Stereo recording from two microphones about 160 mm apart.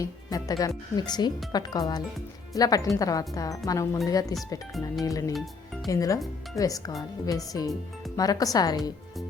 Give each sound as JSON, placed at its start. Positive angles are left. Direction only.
{"t": 0.0, "sound": "speech", "side_deg": 20}